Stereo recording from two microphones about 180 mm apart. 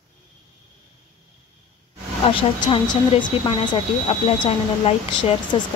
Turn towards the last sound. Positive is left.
turn(degrees=35)  # may be behind; listen again after turning